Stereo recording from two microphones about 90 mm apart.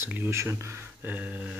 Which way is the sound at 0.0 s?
25° right (ahead or behind).